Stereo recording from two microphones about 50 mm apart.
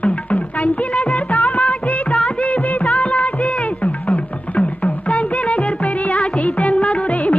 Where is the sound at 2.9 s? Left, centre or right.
Left.